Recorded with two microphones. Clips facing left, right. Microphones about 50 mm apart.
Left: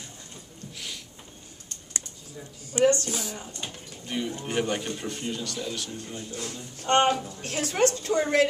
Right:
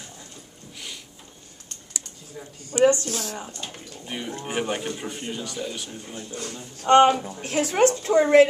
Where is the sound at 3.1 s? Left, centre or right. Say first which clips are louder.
Right 2 dB; centre.